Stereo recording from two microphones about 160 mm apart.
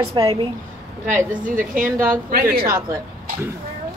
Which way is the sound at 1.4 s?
55° right (ahead or behind).